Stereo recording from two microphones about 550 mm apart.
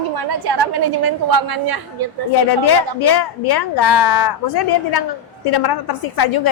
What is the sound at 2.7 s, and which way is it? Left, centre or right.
A woman's voice, left.